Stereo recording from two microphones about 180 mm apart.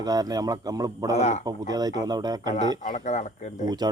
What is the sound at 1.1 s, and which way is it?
Speech, 40° left (ahead or behind).